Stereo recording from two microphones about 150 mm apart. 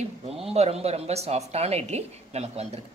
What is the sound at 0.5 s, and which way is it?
A woman's voice, 45° right (ahead or behind).